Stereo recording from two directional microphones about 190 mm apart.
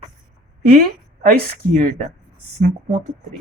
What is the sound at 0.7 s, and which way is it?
A woman's voice, 50° right (ahead or behind).